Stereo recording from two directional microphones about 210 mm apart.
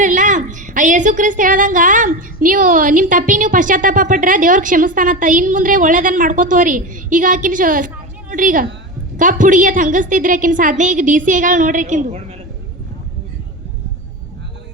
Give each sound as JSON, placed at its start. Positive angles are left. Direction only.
{"t": 0.0, "sound": "a woman's voice", "side_deg": -35}